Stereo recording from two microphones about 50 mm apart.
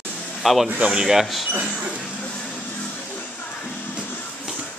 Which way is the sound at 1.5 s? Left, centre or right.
Right.